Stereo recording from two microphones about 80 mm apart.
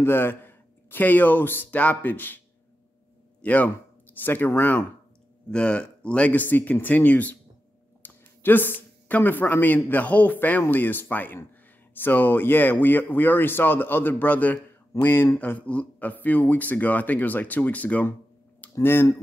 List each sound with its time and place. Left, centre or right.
0.0 s speech: left
3.4 s speech: left
5.5 s speech: centre
8.0 s a sound: left
9.8 s speech: centre